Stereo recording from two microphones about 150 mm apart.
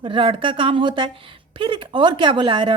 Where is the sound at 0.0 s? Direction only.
35° right (ahead or behind).